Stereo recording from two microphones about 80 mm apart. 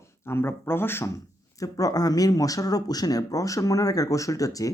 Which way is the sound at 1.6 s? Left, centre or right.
Left.